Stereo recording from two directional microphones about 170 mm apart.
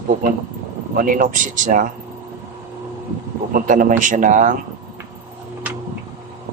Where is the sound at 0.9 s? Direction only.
50° right (ahead or behind).